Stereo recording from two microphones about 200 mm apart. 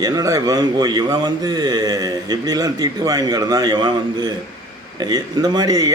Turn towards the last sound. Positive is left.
turn(degrees=-20)  # may be behind; listen again after turning